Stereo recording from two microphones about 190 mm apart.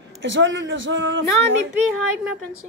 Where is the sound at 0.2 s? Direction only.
75° right (ahead or behind).